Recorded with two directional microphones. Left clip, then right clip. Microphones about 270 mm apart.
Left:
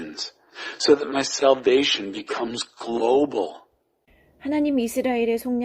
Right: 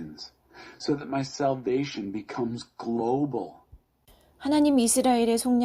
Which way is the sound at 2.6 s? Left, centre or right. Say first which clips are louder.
Left 8 dB; left.